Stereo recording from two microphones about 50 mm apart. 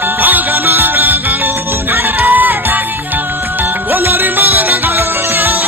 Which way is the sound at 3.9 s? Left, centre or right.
Right.